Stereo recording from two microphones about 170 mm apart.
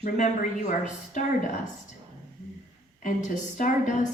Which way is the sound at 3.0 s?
50° left (ahead or behind).